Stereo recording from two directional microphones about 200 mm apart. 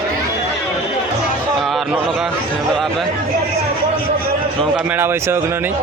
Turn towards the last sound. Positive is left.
turn(degrees=-10)  # may be behind; listen again after turning